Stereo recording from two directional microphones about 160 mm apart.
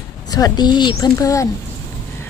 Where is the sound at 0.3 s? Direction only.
25° left (ahead or behind).